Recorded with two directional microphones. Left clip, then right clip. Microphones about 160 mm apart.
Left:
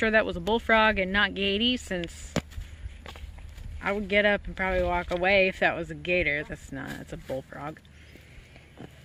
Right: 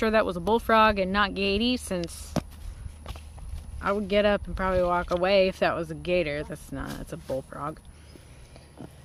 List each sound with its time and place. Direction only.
0.0 s speech: centre (ahead or behind)
2.3 s a sound: 65° left (ahead or behind)
3.8 s speech: 5° left (ahead or behind)